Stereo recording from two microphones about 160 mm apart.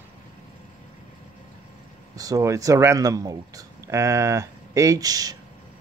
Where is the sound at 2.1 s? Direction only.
20° right (ahead or behind).